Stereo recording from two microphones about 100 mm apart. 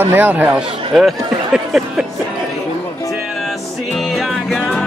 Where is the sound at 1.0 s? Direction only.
Centre (ahead or behind).